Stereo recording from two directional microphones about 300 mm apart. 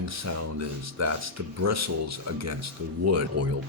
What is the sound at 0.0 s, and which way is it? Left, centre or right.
Speech, right.